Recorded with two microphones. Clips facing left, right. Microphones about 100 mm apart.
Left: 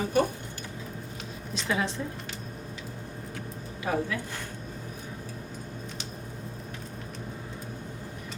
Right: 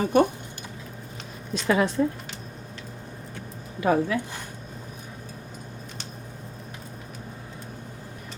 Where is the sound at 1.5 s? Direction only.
50° right (ahead or behind).